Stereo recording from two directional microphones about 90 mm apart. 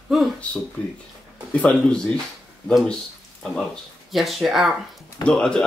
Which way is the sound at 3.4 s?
5° left (ahead or behind).